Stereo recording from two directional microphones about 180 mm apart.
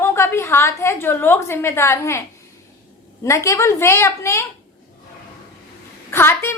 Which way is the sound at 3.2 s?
15° left (ahead or behind).